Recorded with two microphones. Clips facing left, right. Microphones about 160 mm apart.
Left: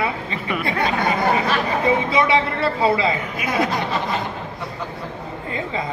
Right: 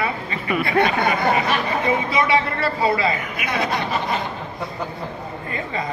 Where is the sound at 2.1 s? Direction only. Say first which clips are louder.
Left 1 dB; 20° left (ahead or behind).